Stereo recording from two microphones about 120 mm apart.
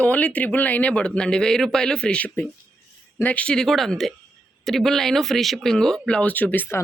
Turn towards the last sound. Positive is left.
turn(degrees=15)  # may be behind; listen again after turning